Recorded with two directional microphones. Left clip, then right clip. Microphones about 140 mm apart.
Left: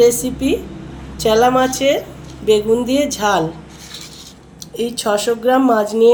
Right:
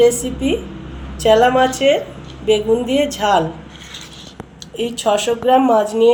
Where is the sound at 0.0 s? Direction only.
55° left (ahead or behind).